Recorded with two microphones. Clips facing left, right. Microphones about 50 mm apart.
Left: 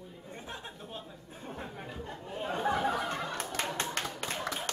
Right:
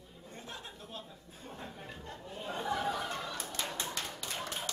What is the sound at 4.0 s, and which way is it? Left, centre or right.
Clapping, left.